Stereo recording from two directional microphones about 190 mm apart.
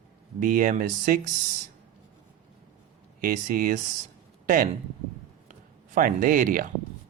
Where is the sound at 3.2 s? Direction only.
45° right (ahead or behind).